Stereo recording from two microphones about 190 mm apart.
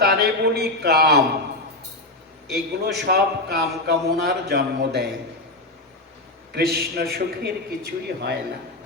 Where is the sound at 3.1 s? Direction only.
60° right (ahead or behind).